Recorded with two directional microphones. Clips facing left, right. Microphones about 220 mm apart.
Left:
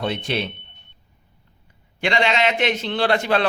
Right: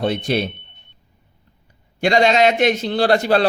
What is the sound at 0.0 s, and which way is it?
Speech, 40° right (ahead or behind).